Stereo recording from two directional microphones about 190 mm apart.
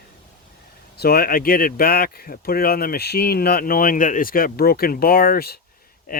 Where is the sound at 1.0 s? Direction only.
50° left (ahead or behind).